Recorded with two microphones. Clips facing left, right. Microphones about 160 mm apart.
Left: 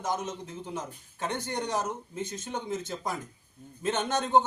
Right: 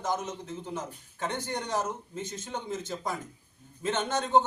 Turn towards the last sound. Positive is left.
turn(degrees=20)  # may be behind; listen again after turning